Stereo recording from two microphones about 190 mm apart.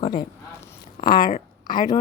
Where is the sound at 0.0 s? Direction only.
25° left (ahead or behind).